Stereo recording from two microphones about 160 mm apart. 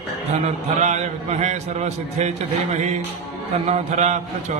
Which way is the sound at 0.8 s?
45° right (ahead or behind).